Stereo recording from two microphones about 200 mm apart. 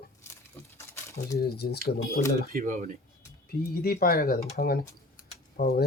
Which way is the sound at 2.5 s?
40° right (ahead or behind).